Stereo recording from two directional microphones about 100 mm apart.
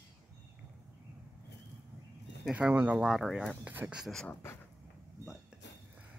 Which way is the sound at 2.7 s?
15° right (ahead or behind).